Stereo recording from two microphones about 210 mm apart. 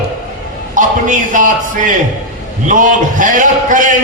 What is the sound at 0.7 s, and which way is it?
A man's voice, 40° right (ahead or behind).